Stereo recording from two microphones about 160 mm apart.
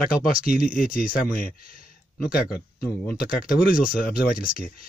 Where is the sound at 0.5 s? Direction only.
60° left (ahead or behind).